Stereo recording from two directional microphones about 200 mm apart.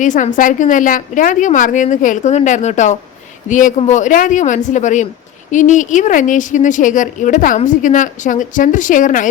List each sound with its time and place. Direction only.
0.0 s a woman's voice: 40° left (ahead or behind)